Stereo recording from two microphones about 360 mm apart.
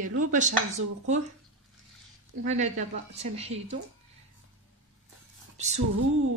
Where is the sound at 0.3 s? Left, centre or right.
Centre.